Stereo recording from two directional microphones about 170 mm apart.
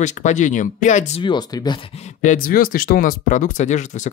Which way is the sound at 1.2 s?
25° left (ahead or behind).